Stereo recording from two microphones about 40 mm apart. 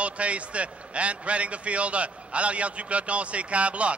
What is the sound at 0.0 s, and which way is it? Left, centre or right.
A man's voice, right.